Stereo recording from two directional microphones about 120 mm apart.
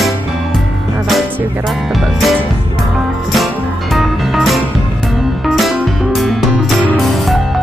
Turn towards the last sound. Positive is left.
turn(degrees=0)  # may be behind; listen again after turning